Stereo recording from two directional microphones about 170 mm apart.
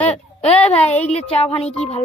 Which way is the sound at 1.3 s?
35° left (ahead or behind).